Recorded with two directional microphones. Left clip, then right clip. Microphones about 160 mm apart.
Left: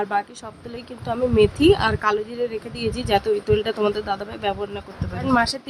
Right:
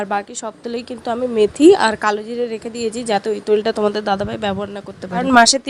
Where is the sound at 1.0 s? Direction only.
35° right (ahead or behind).